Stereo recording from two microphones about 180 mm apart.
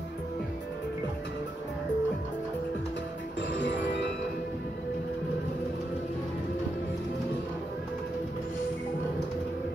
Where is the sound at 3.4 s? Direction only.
80° left.